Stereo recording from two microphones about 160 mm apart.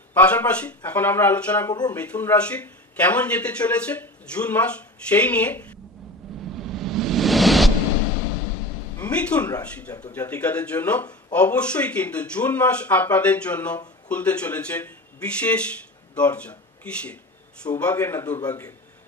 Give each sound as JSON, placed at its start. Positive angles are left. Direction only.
{"t": 0.1, "sound": "speech", "side_deg": 10}
{"t": 1.7, "sound": "speech", "side_deg": 25}
{"t": 2.0, "sound": "speech", "side_deg": 10}
{"t": 6.5, "sound": "a sound", "side_deg": 0}
{"t": 8.9, "sound": "a sound", "side_deg": 10}
{"t": 10.1, "sound": "speech", "side_deg": 10}